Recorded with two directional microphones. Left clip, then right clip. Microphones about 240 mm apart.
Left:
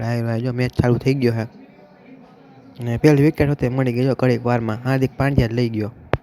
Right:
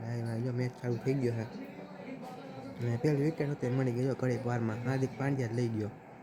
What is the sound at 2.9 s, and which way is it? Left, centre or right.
Speech, left.